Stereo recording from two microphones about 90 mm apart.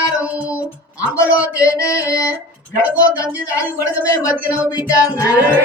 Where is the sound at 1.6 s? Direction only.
35° left (ahead or behind).